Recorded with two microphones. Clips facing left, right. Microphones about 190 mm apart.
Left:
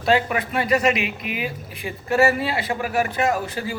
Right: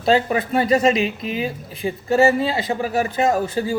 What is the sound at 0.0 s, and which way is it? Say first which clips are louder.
Speech: right 3 dB; 30° right (ahead or behind).